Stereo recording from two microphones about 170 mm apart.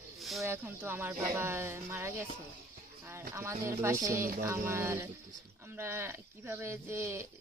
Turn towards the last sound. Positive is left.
turn(degrees=-15)  # may be behind; listen again after turning